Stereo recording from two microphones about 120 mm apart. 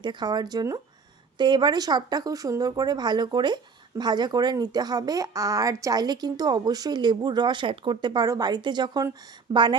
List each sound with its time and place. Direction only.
0.0 s speech: 40° right (ahead or behind)